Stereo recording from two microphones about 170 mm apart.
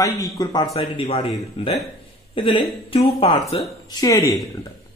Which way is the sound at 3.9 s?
20° left (ahead or behind).